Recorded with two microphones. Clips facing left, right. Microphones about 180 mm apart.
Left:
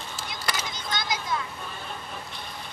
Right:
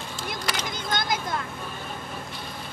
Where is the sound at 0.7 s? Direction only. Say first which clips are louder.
Right 4 dB; 50° right (ahead or behind).